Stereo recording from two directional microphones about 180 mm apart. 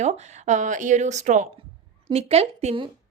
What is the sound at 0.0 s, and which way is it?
A woman's voice, 40° right (ahead or behind).